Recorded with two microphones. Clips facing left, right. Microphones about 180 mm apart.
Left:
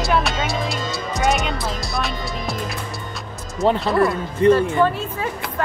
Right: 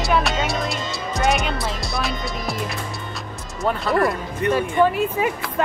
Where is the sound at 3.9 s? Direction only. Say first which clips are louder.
Left 2 dB; 20° left (ahead or behind).